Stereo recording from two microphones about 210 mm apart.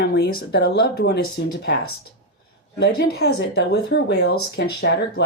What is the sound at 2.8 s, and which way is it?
Speech, 50° left (ahead or behind).